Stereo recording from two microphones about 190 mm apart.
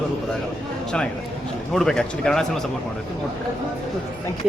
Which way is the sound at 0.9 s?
5° left (ahead or behind).